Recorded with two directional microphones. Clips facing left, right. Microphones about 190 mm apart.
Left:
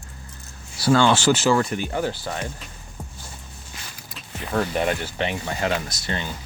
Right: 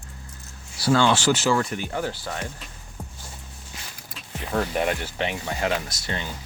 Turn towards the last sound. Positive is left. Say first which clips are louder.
# left 2 dB
turn(degrees=-10)  # may be behind; listen again after turning